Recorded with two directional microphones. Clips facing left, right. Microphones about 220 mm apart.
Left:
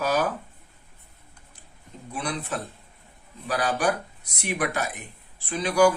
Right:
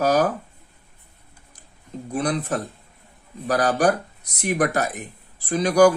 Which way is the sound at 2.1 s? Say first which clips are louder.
Right 7 dB; 40° right (ahead or behind).